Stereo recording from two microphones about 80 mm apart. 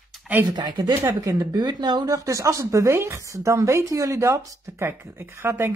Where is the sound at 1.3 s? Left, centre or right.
Right.